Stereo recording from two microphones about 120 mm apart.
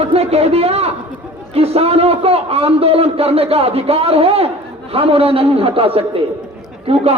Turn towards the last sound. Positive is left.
turn(degrees=-55)  # may be behind; listen again after turning